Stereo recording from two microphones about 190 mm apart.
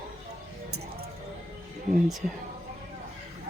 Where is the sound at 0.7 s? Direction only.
55° right (ahead or behind).